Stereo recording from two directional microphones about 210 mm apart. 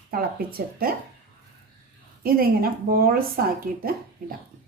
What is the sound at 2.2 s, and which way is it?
Speech, 45° right (ahead or behind).